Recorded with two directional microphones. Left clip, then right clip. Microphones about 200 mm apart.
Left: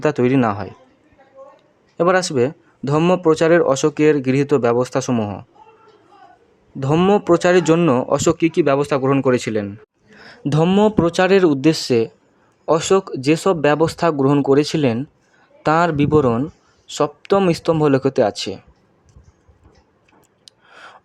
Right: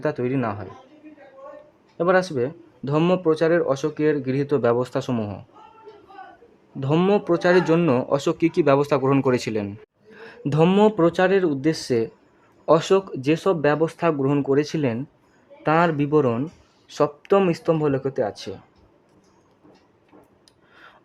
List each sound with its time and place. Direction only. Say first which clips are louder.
0.0 s speech: left 8 dB; 25° left (ahead or behind)
2.0 s speech: left 4 dB; 20° left (ahead or behind)
6.7 s speech: left 4 dB; 10° left (ahead or behind)
7.3 s speech: left 4 dB; 20° left (ahead or behind)
20.4 s a sound: left 12 dB; 20° left (ahead or behind)